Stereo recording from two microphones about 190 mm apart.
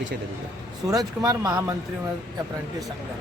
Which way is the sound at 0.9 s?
20° right (ahead or behind).